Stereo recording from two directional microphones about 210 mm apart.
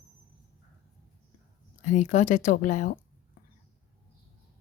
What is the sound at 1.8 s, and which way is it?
Speech, 35° left (ahead or behind).